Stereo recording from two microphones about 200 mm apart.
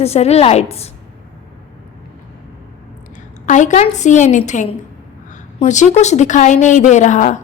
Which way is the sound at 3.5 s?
40° left (ahead or behind).